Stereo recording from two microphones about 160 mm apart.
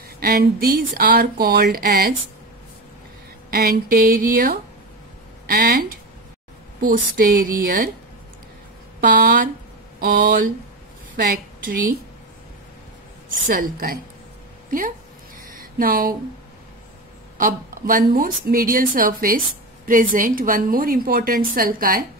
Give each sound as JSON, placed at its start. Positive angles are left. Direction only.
{"t": 0.2, "sound": "speech", "side_deg": -70}
{"t": 3.4, "sound": "a woman's voice", "side_deg": -65}
{"t": 9.0, "sound": "a woman's voice", "side_deg": -60}
{"t": 13.5, "sound": "a woman's voice", "side_deg": -65}
{"t": 15.5, "sound": "a sound", "side_deg": -65}
{"t": 17.4, "sound": "a woman's voice", "side_deg": -60}